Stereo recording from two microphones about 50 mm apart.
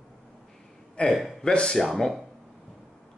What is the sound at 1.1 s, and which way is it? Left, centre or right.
Speech, centre.